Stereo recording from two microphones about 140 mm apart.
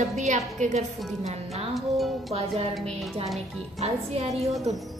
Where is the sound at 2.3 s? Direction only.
45° right (ahead or behind).